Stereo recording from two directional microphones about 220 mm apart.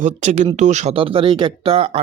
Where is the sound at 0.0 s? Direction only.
30° right (ahead or behind).